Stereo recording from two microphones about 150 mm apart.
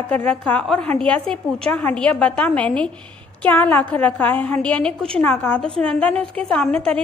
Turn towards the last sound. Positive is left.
turn(degrees=5)  # may be behind; listen again after turning